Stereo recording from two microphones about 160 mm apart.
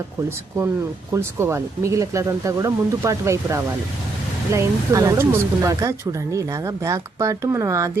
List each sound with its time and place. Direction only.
0.3 s speech: 15° right (ahead or behind)